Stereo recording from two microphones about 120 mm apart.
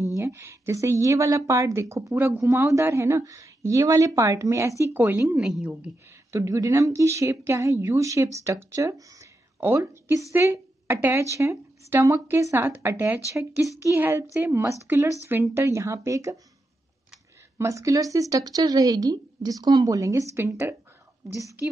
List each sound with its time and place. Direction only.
0.0 s a woman's voice: 25° right (ahead or behind)
5.4 s a woman's voice: 5° right (ahead or behind)
6.3 s a woman's voice: 25° right (ahead or behind)
17.6 s a woman's voice: 25° right (ahead or behind)